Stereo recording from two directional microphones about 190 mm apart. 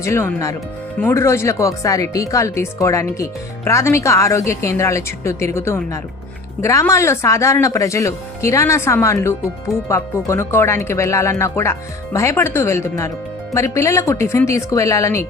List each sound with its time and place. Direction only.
0.0 s speech: 15° left (ahead or behind)